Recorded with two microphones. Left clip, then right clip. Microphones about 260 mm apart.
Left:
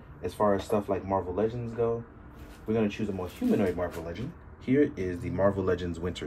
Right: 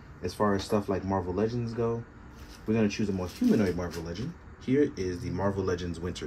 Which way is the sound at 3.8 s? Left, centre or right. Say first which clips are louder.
Left 3 dB; centre.